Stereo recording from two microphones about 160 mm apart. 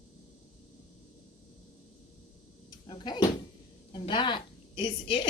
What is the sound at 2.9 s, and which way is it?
Door, 30° left (ahead or behind).